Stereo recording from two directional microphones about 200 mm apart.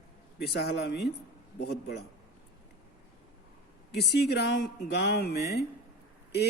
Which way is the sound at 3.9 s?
55° left (ahead or behind).